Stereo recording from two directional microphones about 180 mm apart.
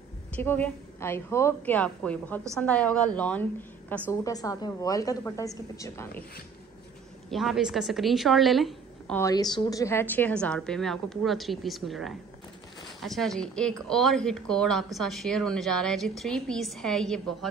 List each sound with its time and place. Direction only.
0.4 s a woman's voice: 10° left (ahead or behind)
4.1 s a woman's voice: 20° left (ahead or behind)
7.2 s a woman's voice: centre (ahead or behind)
9.2 s a woman's voice: 20° left (ahead or behind); by 17.5 s centre (ahead or behind)